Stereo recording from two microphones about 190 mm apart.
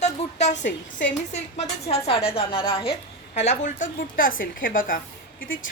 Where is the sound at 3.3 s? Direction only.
40° left (ahead or behind).